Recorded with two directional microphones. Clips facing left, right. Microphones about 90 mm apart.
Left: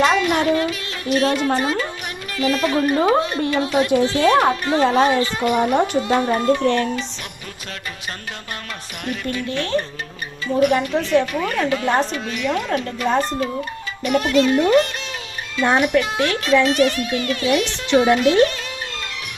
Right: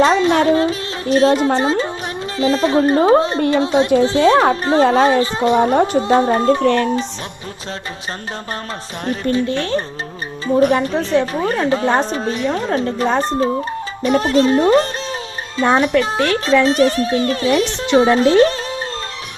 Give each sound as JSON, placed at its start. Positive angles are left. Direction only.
{"t": 0.0, "sound": "a woman's voice", "side_deg": -30}
{"t": 6.6, "sound": "speech", "side_deg": -50}
{"t": 9.0, "sound": "speech", "side_deg": -30}